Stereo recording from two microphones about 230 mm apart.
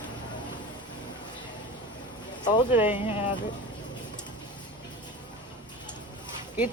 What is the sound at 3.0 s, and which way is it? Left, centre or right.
Speech, left.